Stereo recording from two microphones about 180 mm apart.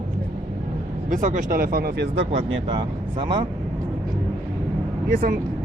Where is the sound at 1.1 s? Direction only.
45° right (ahead or behind); by 2.6 s 70° right (ahead or behind).